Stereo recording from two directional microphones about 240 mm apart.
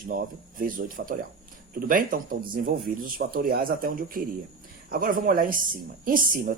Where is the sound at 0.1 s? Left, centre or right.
Right.